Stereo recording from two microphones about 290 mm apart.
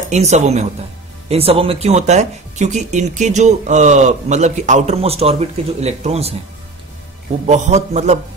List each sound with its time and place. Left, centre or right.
0.1 s speech: right
7.4 s speech: right